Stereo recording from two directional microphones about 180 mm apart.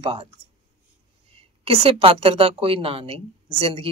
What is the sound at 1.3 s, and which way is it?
A woman's voice, 30° right (ahead or behind).